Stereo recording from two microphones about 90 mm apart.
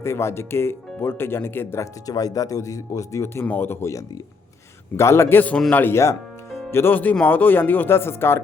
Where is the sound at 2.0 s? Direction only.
40° left (ahead or behind).